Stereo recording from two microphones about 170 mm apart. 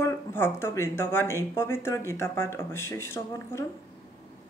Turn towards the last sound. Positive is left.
turn(degrees=15)  # may be behind; listen again after turning